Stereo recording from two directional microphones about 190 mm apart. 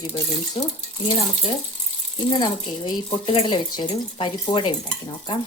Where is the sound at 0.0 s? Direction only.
30° left (ahead or behind).